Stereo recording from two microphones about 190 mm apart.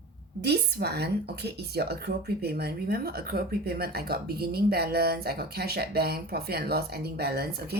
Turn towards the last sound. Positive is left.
turn(degrees=-55)  # may be behind; listen again after turning